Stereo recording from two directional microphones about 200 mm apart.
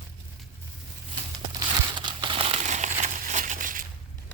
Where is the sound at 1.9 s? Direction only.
25° right (ahead or behind); by 3.8 s 40° right (ahead or behind).